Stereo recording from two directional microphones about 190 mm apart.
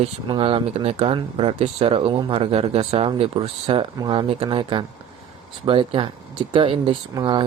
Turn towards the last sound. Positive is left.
turn(degrees=-20)  # may be behind; listen again after turning